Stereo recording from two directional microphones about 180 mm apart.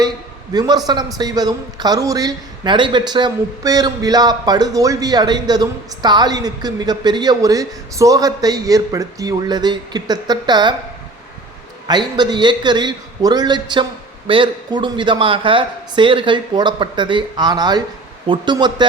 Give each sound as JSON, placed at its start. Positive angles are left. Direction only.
{"t": 0.5, "sound": "a man's voice", "side_deg": -20}
{"t": 11.9, "sound": "a man's voice", "side_deg": -25}